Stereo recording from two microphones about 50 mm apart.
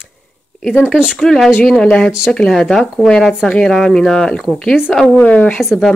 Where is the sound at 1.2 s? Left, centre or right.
Centre.